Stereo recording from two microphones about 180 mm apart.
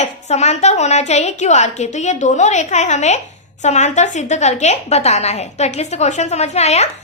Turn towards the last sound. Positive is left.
turn(degrees=40)  # may be behind; listen again after turning